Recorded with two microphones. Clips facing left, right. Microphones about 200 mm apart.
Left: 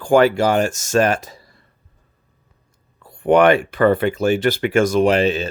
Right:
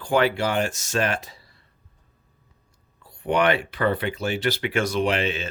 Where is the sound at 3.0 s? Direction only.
50° left (ahead or behind).